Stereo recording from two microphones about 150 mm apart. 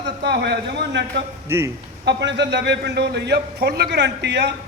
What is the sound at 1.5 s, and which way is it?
Speech, 15° right (ahead or behind).